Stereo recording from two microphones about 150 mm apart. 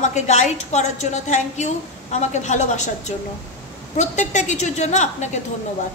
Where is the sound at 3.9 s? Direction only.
55° left (ahead or behind).